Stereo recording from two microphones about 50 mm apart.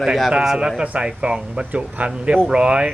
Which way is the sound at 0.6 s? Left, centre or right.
Centre.